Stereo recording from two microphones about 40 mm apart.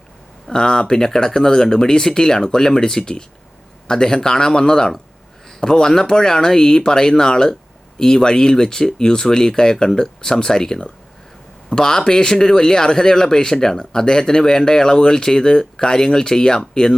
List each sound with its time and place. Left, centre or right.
0.4 s speech: centre